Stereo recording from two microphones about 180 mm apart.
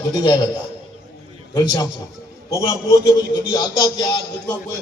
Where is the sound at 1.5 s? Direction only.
20° left (ahead or behind).